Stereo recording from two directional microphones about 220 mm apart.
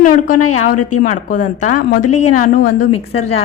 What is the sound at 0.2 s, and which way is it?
A woman's voice, 90° left.